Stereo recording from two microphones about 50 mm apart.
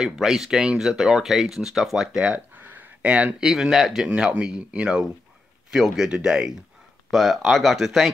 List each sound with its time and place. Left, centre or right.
0.2 s speech: centre
2.2 s a sound: right
3.4 s speech: centre
4.1 s speech: right
5.7 s speech: centre
7.1 s speech: centre